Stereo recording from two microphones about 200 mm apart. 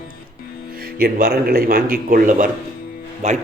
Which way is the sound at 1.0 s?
50° right (ahead or behind).